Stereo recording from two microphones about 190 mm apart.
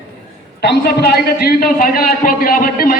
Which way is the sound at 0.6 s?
60° left (ahead or behind).